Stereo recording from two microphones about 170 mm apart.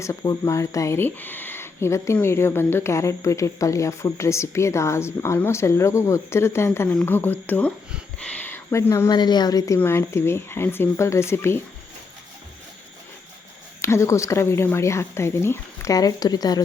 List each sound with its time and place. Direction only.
0.0 s speech: 20° left (ahead or behind)
13.8 s speech: 15° left (ahead or behind)